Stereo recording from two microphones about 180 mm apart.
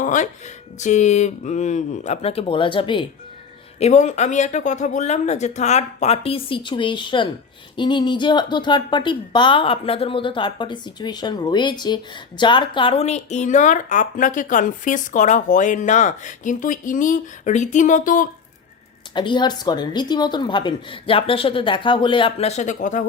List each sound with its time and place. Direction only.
0.0 s speech: 45° left (ahead or behind); by 3.1 s 25° left (ahead or behind)
3.8 s speech: 40° left (ahead or behind)
19.1 s speech: 25° left (ahead or behind); by 23.0 s 45° left (ahead or behind)